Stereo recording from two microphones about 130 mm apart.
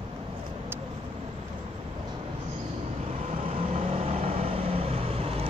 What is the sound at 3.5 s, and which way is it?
Vehicle, 50° right (ahead or behind).